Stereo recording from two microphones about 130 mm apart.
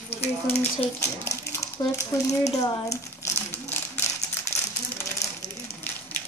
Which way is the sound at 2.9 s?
25° left (ahead or behind).